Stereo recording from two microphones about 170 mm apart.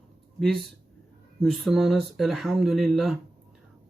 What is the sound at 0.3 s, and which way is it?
Speech, 5° left (ahead or behind).